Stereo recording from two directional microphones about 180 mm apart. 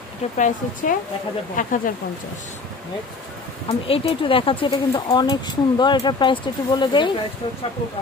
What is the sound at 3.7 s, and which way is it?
Speech, 30° left (ahead or behind).